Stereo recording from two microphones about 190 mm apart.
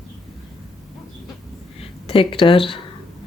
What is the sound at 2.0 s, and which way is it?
Speech, 30° left (ahead or behind).